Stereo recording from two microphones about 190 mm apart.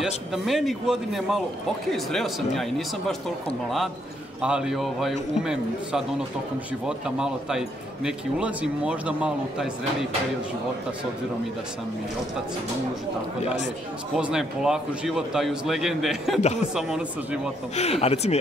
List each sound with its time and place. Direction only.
0.0 s a man's voice: centre (ahead or behind)
4.4 s a man's voice: 5° right (ahead or behind)
14.1 s a man's voice: 5° right (ahead or behind)
17.7 s speech: 35° left (ahead or behind)